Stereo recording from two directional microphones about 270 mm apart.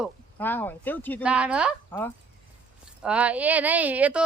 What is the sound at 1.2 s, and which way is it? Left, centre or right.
Speech, centre.